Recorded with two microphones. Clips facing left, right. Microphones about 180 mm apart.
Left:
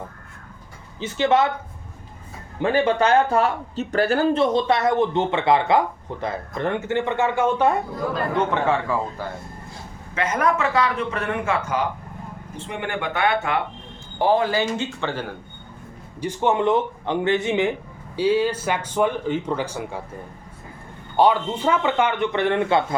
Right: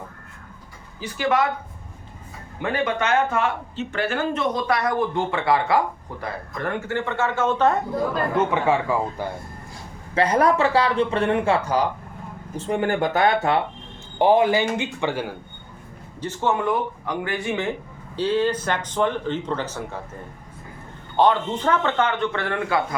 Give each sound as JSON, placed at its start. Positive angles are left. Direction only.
{"t": 0.9, "sound": "speech", "side_deg": 25}
{"t": 2.6, "sound": "speech", "side_deg": 30}
{"t": 8.4, "sound": "a man's voice", "side_deg": -15}
{"t": 10.2, "sound": "speech", "side_deg": -35}
{"t": 14.2, "sound": "a man's voice", "side_deg": -20}
{"t": 16.2, "sound": "speech", "side_deg": 15}
{"t": 18.2, "sound": "speech", "side_deg": 10}
{"t": 21.2, "sound": "speech", "side_deg": 10}